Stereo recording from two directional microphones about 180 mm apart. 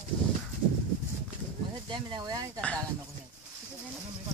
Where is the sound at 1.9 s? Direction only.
25° right (ahead or behind).